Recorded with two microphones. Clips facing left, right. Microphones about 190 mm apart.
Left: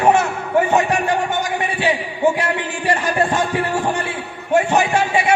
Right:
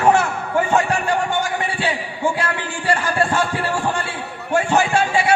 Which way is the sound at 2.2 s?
20° left (ahead or behind).